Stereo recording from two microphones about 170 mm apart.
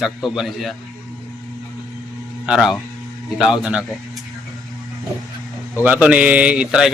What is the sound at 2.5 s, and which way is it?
A man's voice, 5° right (ahead or behind).